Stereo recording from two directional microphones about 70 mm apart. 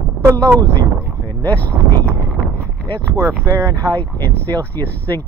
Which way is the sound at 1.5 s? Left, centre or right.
Left.